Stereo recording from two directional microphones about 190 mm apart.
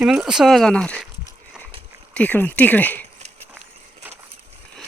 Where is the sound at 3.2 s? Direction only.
35° right (ahead or behind).